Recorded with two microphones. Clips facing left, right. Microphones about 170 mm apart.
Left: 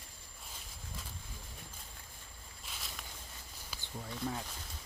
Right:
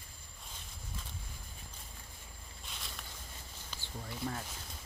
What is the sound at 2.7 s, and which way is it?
Walk, centre (ahead or behind).